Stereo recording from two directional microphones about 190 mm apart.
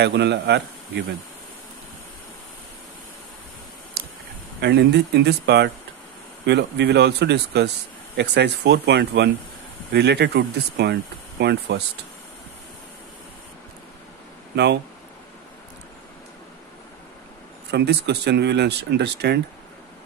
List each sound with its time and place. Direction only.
0.0 s speech: 65° right (ahead or behind)
4.6 s speech: 65° right (ahead or behind)
14.5 s speech: 65° right (ahead or behind)
17.6 s speech: 60° right (ahead or behind)